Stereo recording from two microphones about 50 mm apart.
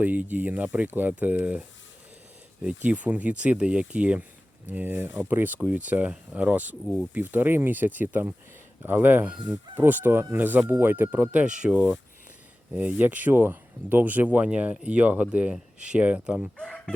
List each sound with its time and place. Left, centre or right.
0.0 s speech: right
2.6 s speech: right
9.2 s speech: right
9.7 s speech: right
11.1 s speech: right
13.3 s speech: right